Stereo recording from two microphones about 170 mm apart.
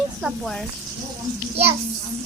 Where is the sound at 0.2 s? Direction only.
Centre (ahead or behind).